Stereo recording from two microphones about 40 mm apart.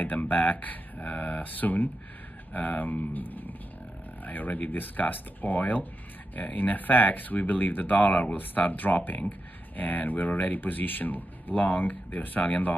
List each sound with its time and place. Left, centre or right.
0.0 s speech: left